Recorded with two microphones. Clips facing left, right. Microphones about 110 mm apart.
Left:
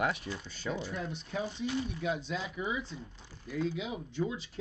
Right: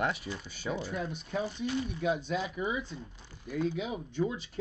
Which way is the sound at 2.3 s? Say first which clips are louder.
Right 3 dB; 10° right (ahead or behind).